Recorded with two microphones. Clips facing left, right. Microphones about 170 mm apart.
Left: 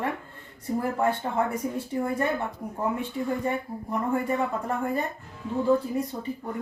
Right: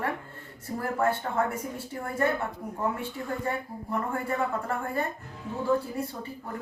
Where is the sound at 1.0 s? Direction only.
15° left (ahead or behind).